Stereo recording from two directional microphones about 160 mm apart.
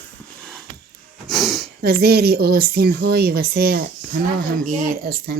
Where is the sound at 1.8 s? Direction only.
75° right (ahead or behind).